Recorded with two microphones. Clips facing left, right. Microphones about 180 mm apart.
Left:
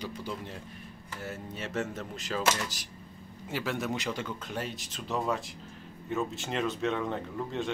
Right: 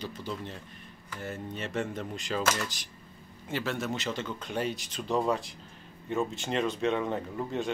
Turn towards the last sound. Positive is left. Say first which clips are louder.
# right 1 dB
turn(degrees=-5)  # may be behind; listen again after turning